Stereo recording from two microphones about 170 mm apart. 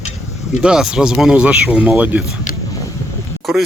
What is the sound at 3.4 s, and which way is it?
Speech, centre (ahead or behind).